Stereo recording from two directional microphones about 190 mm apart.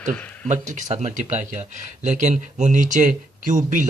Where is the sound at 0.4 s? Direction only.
40° right (ahead or behind).